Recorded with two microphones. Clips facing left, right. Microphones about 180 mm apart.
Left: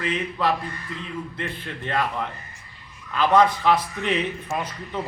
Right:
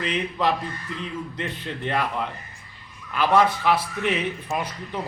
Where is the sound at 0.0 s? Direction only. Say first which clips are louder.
Even; 20° right (ahead or behind).